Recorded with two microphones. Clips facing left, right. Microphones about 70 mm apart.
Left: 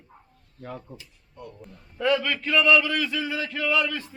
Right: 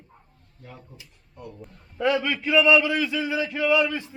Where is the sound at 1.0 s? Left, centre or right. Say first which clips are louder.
Even; centre.